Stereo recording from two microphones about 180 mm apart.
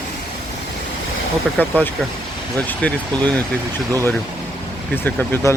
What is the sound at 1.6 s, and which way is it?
Speech, 10° left (ahead or behind).